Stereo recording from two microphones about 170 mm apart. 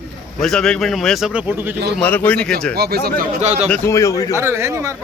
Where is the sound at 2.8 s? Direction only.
70° right (ahead or behind).